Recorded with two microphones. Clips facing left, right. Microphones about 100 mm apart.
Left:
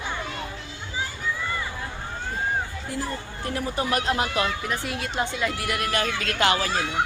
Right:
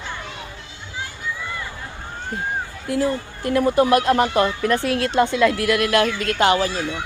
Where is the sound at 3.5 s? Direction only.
55° right (ahead or behind).